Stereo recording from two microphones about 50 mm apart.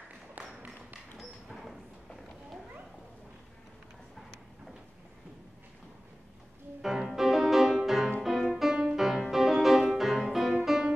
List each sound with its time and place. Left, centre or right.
0.4 s tap: right
1.1 s a sound: centre
6.8 s music: centre